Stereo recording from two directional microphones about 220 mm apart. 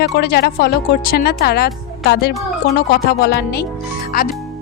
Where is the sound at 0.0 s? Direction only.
45° left (ahead or behind).